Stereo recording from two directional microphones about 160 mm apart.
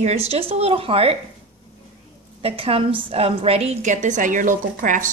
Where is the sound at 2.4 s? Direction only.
35° right (ahead or behind).